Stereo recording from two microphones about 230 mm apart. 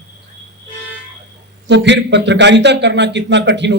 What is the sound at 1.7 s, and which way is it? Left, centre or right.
A man's voice, right.